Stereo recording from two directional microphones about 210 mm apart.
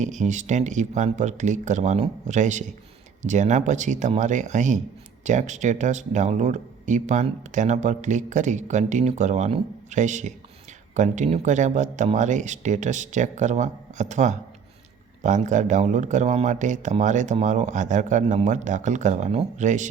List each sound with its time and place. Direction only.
0.0 s speech: 35° right (ahead or behind)